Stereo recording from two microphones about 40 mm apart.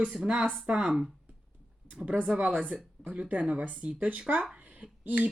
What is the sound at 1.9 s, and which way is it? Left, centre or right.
Speech, right.